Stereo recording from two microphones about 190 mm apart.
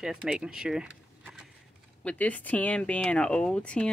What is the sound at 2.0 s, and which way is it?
Speech, 10° left (ahead or behind).